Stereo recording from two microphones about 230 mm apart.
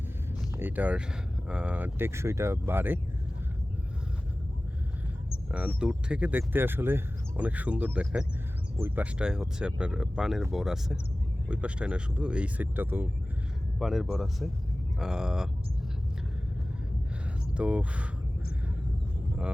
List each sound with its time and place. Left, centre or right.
0.5 s speech: centre
5.5 s speech: centre
17.5 s speech: centre